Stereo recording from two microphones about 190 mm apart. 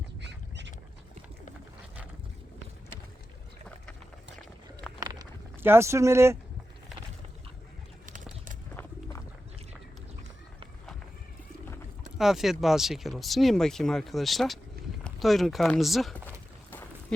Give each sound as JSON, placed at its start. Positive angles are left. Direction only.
{"t": 0.2, "sound": "duck", "side_deg": -65}
{"t": 4.9, "sound": "a sound", "side_deg": -20}
{"t": 8.0, "sound": "bird", "side_deg": -45}
{"t": 12.1, "sound": "speech", "side_deg": 0}